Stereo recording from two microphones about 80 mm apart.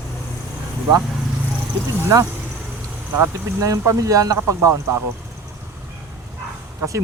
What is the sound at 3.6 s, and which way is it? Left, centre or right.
Speech, right.